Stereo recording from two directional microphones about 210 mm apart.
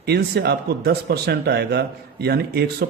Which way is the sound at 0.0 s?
50° right (ahead or behind).